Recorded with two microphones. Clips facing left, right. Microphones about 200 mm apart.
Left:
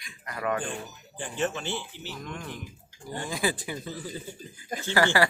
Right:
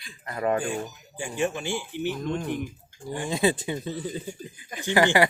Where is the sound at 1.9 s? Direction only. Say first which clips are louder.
Right 12 dB; 55° right (ahead or behind).